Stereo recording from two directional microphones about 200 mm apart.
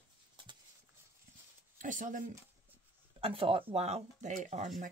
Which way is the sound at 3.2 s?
30° right (ahead or behind).